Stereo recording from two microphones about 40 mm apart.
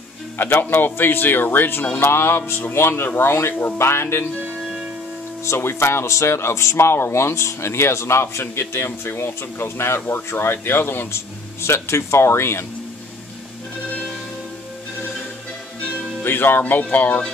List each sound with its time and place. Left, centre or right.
0.4 s speech: left
2.0 s music: left
2.7 s speech: left
5.6 s speech: left
11.7 s speech: left
16.3 s speech: left